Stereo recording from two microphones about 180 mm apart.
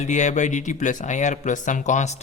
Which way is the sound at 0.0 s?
40° left (ahead or behind).